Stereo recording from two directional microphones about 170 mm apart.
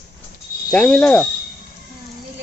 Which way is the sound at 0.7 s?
5° left (ahead or behind).